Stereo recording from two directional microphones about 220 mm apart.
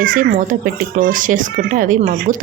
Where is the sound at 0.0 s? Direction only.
40° right (ahead or behind).